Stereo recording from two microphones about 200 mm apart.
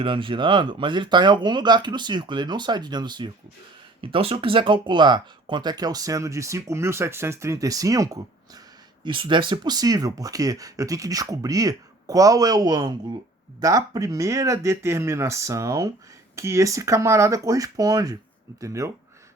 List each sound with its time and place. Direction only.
0.0 s speech: 25° right (ahead or behind)